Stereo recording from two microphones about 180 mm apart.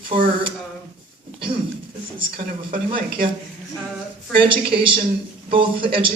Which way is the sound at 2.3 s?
55° right (ahead or behind).